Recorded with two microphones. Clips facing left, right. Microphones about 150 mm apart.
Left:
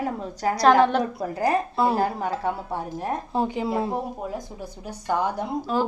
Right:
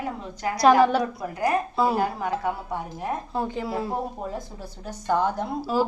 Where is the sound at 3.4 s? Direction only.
20° left (ahead or behind).